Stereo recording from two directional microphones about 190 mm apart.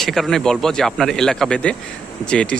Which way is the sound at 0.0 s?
Centre (ahead or behind).